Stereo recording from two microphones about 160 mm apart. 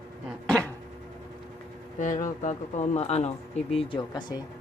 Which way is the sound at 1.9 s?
50° left (ahead or behind).